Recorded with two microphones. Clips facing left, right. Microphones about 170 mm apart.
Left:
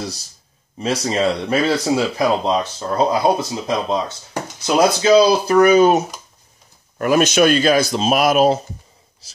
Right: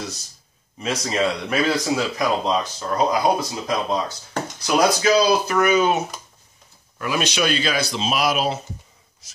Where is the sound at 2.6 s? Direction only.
30° left (ahead or behind).